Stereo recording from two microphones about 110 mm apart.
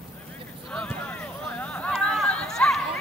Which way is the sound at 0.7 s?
10° left (ahead or behind).